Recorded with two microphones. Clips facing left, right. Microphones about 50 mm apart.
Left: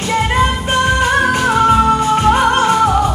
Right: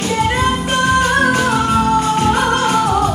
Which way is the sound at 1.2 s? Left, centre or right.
Left.